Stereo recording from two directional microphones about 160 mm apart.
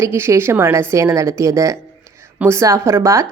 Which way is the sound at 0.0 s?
15° right (ahead or behind).